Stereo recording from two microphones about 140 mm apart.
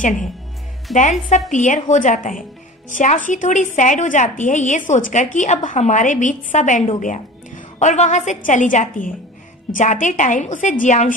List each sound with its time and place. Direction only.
0.9 s a woman's voice: centre (ahead or behind)
1.5 s a woman's voice: 60° left (ahead or behind)